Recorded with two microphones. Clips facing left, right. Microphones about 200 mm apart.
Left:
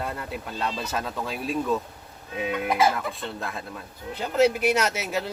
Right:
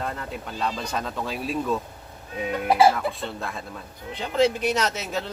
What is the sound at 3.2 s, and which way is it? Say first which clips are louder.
Speech: right 1 dB; centre (ahead or behind).